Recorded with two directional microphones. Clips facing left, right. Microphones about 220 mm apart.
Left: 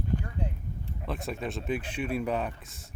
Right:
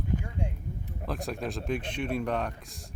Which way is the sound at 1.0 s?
Centre (ahead or behind).